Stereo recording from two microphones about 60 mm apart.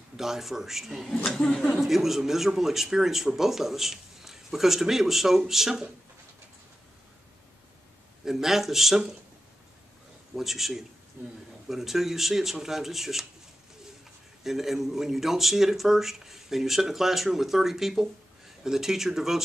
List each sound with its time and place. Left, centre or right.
0.2 s speech: centre
1.2 s a woman's voice: centre
1.7 s speech: centre
8.3 s speech: centre
10.3 s speech: centre
11.2 s a man's voice: right
11.7 s speech: centre
14.4 s speech: centre